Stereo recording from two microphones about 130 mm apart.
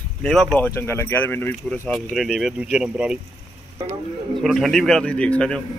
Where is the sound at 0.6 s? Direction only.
20° left (ahead or behind).